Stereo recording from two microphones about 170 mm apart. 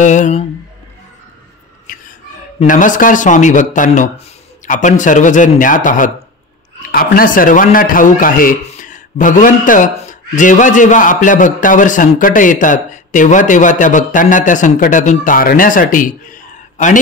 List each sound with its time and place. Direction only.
0.0 s speech: 45° left (ahead or behind)
2.6 s a man's voice: 50° left (ahead or behind)